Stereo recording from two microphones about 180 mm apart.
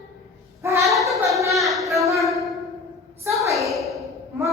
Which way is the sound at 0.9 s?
Centre (ahead or behind).